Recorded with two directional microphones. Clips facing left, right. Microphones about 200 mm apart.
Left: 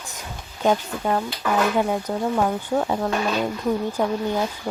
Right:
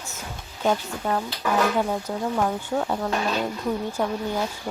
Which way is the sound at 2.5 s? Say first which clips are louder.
Left 3 dB; 10° left (ahead or behind).